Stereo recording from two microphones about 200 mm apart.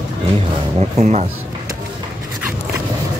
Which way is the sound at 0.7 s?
35° right (ahead or behind).